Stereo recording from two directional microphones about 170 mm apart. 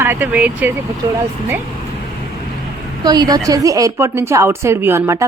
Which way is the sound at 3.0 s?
25° right (ahead or behind).